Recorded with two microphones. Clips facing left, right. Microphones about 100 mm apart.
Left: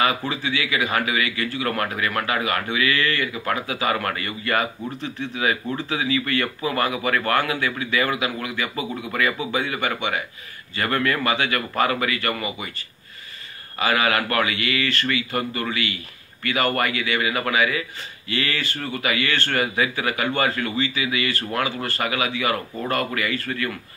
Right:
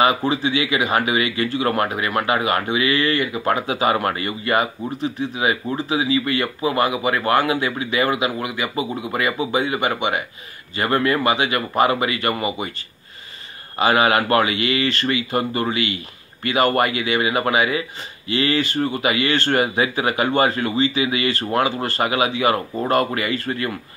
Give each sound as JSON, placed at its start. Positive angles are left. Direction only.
{"t": 0.0, "sound": "speech", "side_deg": -25}
{"t": 13.7, "sound": "speech", "side_deg": -25}